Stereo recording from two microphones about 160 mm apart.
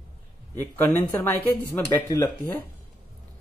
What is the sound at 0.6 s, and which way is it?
Speech, 10° left (ahead or behind).